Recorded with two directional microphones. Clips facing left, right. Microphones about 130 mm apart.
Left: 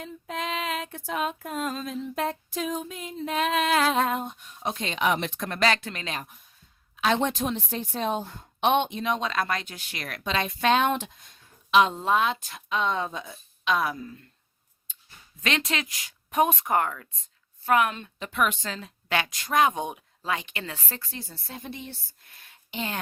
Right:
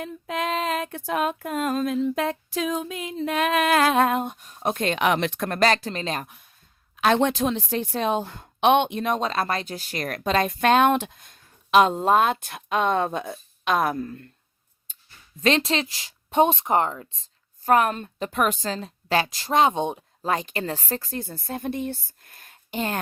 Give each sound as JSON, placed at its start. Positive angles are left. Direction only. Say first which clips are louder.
{"t": 0.0, "sound": "a woman's voice", "louder": "right 5 dB", "side_deg": -60}
{"t": 0.5, "sound": "speech", "louder": "right 5 dB", "side_deg": -45}
{"t": 0.9, "sound": "a woman's voice", "louder": "right 4 dB", "side_deg": -65}
{"t": 4.4, "sound": "a sound", "louder": "right 5 dB", "side_deg": -40}
{"t": 4.7, "sound": "speech", "louder": "right 4 dB", "side_deg": -55}
{"t": 5.5, "sound": "a woman's voice", "louder": "right 3 dB", "side_deg": -40}
{"t": 6.2, "sound": "speech", "louder": "right 3 dB", "side_deg": -75}
{"t": 6.9, "sound": "a woman's voice", "louder": "right 4 dB", "side_deg": -55}
{"t": 15.4, "sound": "speech", "louder": "right 7 dB", "side_deg": -35}
{"t": 17.6, "sound": "a woman's voice", "louder": "right 3 dB", "side_deg": -40}
{"t": 20.0, "sound": "speech", "louder": "right 5 dB", "side_deg": -40}